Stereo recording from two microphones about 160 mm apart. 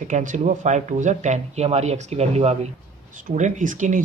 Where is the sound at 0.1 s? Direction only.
55° right (ahead or behind).